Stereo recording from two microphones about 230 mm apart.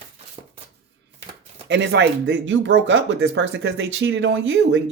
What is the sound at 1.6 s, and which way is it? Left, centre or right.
Speech, right.